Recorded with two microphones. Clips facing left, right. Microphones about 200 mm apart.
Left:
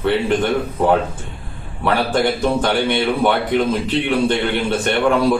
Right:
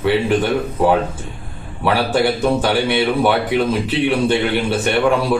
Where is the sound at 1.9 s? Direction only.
10° right (ahead or behind).